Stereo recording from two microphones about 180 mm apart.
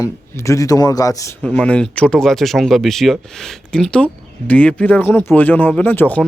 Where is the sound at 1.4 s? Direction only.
5° left (ahead or behind).